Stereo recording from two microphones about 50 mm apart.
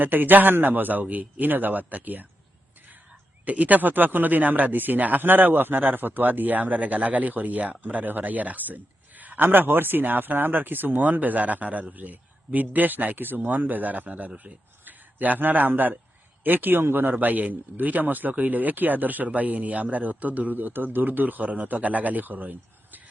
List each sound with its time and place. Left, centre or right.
0.0 s speech: right
3.4 s speech: right